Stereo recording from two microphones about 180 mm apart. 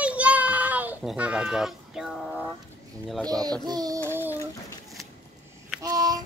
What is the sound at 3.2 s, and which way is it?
Music, 20° right (ahead or behind).